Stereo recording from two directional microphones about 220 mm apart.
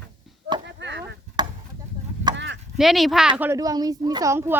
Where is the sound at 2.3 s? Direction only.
55° right (ahead or behind).